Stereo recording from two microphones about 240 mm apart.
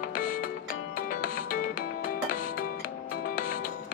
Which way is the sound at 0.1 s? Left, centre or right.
Left.